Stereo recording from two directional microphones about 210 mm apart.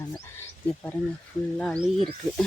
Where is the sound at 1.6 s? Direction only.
5° left (ahead or behind).